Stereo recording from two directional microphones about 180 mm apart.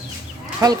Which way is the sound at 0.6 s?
15° right (ahead or behind).